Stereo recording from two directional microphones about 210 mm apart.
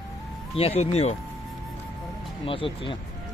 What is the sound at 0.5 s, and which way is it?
Speech, 30° left (ahead or behind).